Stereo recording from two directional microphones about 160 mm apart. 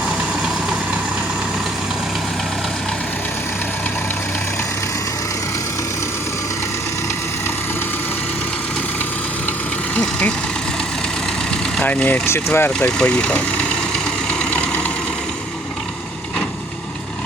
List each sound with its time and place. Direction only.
9.9 s vehicle: 10° left (ahead or behind)
11.8 s speech: 10° left (ahead or behind)